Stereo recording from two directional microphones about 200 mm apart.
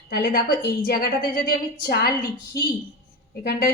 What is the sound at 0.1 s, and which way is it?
A woman's voice, 50° left (ahead or behind).